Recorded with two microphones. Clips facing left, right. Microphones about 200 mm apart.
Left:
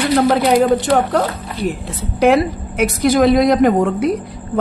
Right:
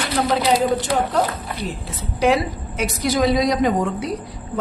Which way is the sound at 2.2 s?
55° left (ahead or behind).